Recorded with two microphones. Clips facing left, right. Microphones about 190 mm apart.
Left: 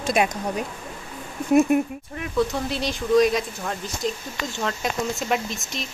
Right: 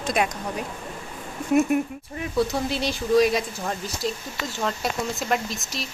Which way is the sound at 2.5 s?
5° right (ahead or behind).